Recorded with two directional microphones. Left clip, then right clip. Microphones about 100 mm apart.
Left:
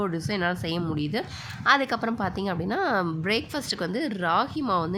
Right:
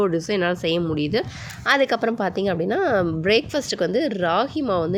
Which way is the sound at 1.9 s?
35° right (ahead or behind).